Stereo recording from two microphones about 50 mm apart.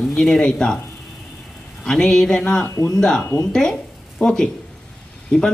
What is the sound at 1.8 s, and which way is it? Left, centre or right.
Speech, centre.